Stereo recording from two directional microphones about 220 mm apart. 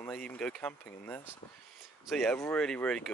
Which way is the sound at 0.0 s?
5° left (ahead or behind).